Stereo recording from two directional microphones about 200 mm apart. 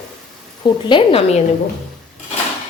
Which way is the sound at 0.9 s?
25° left (ahead or behind).